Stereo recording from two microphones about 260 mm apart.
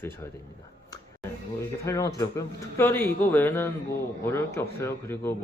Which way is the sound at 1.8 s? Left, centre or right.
Centre.